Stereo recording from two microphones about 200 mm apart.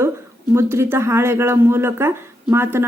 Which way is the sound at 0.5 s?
15° right (ahead or behind).